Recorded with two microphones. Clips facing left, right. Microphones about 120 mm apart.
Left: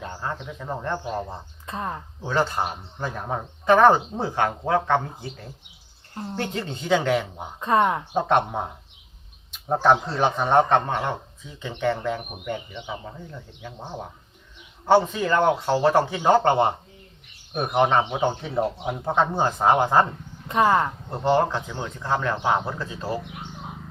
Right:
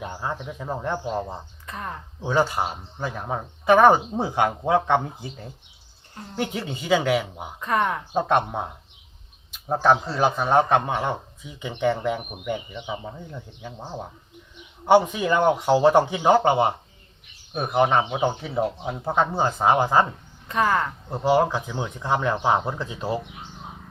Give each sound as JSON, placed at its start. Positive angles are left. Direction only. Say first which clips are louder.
{"t": 0.0, "sound": "speech", "louder": "right 1 dB", "side_deg": -10}
{"t": 1.6, "sound": "a sound", "louder": "left 5 dB", "side_deg": 25}
{"t": 2.2, "sound": "speech", "louder": "right 2 dB", "side_deg": -10}
{"t": 7.6, "sound": "speech", "louder": "left 3 dB", "side_deg": 25}
{"t": 8.1, "sound": "speech", "louder": "even", "side_deg": 0}
{"t": 9.8, "sound": "speech", "louder": "even", "side_deg": 0}
{"t": 14.8, "sound": "speech", "louder": "right 1 dB", "side_deg": -15}
{"t": 20.5, "sound": "speech", "louder": "left 3 dB", "side_deg": 25}
{"t": 21.1, "sound": "speech", "louder": "right 2 dB", "side_deg": -10}